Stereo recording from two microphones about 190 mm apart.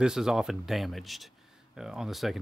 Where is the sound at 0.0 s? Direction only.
5° right (ahead or behind).